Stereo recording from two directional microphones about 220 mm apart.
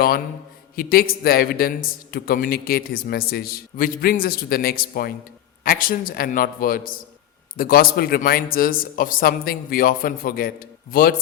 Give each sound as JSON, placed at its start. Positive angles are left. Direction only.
{"t": 0.8, "sound": "a man's voice", "side_deg": 40}